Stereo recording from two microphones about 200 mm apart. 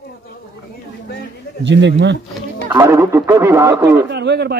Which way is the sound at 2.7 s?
15° right (ahead or behind).